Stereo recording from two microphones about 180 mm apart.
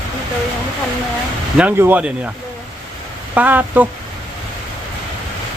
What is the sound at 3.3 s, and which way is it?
Speech, 10° right (ahead or behind).